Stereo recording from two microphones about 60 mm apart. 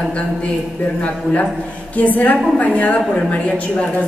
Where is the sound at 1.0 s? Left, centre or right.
Left.